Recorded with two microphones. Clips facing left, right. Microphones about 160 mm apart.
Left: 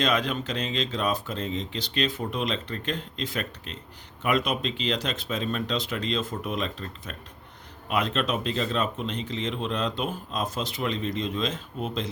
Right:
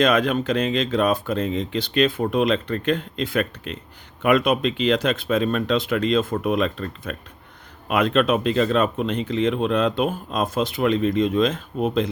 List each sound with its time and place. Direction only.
0.0 s speech: 55° right (ahead or behind)